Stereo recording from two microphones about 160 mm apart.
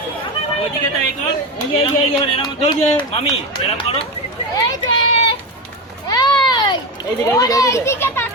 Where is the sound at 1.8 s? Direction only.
35° left (ahead or behind).